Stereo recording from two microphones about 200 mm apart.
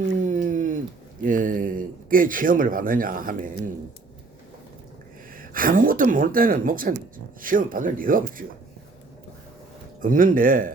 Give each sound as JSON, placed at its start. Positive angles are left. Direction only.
{"t": 0.3, "sound": "a sound", "side_deg": -40}
{"t": 1.2, "sound": "speech", "side_deg": -40}
{"t": 5.4, "sound": "speech", "side_deg": -45}
{"t": 10.0, "sound": "speech", "side_deg": -45}